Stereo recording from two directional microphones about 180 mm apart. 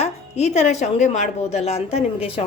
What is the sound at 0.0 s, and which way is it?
Speech, 40° left (ahead or behind).